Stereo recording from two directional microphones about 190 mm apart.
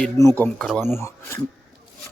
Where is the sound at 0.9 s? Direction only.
15° left (ahead or behind).